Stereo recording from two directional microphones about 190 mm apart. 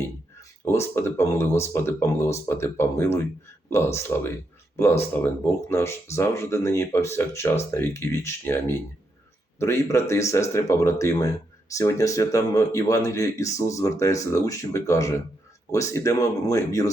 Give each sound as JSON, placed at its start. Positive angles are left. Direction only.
{"t": 0.6, "sound": "speech", "side_deg": 15}
{"t": 9.6, "sound": "speech", "side_deg": 15}